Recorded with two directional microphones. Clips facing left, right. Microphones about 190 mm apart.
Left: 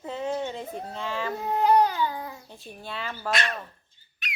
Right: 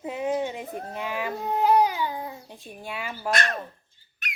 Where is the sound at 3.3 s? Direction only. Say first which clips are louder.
Right 2 dB; 45° right (ahead or behind).